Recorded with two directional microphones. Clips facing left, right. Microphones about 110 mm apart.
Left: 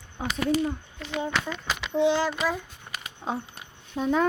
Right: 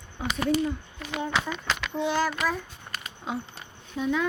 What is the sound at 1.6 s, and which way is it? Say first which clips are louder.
Speech: left 5 dB; 10° left (ahead or behind).